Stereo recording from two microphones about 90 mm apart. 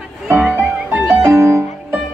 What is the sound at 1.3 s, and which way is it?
Music, 30° right (ahead or behind).